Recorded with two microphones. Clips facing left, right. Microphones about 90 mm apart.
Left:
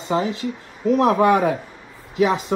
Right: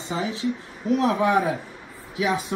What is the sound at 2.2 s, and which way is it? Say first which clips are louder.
Speech: left 6 dB; 55° left (ahead or behind).